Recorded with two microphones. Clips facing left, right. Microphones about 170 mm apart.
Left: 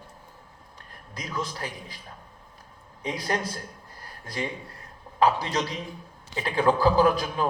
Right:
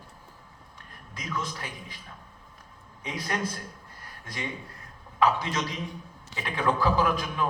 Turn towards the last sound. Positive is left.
turn(degrees=35)  # may be behind; listen again after turning